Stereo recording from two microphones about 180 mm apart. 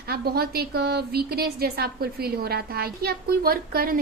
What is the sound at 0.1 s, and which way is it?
A woman's voice, 60° right (ahead or behind).